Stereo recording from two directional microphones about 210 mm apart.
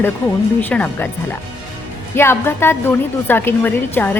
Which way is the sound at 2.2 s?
10° left (ahead or behind).